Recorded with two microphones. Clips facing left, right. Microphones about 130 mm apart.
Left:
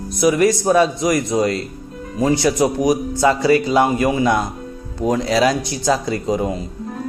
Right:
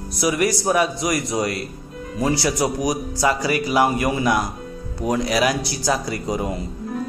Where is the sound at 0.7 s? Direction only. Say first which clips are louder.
Left 5 dB; 25° left (ahead or behind).